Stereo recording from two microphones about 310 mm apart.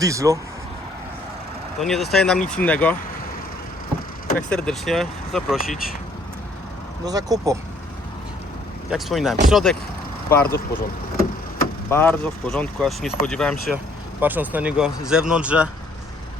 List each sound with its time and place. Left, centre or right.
0.0 s speech: centre
1.8 s speech: centre
4.4 s speech: centre
7.0 s speech: centre
8.9 s speech: centre
11.9 s speech: centre